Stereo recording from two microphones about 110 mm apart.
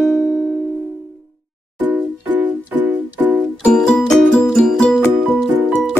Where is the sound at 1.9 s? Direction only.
15° right (ahead or behind).